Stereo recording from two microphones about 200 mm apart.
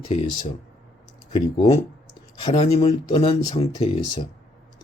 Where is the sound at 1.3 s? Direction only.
30° left (ahead or behind).